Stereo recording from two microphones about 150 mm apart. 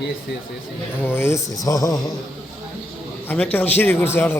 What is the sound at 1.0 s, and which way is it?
Speech, 15° left (ahead or behind).